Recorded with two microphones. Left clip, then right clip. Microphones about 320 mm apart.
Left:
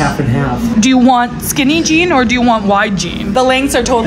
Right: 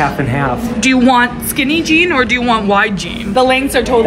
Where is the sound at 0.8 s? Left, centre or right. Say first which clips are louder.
Even; left.